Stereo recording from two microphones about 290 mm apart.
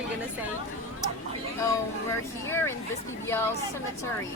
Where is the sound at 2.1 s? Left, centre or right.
Centre.